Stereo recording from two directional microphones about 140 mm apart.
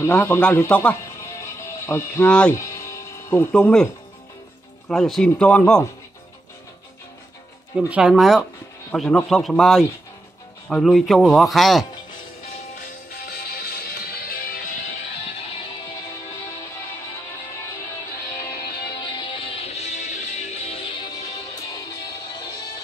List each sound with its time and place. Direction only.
0.0 s speech: 15° left (ahead or behind)
1.2 s music: 20° left (ahead or behind)
2.5 s music: 20° left (ahead or behind)
3.5 s speech: 5° left (ahead or behind)
4.8 s a man's voice: centre (ahead or behind)
7.7 s a man's voice: 5° right (ahead or behind)
12.8 s music: 90° left
18.9 s music: 35° left (ahead or behind)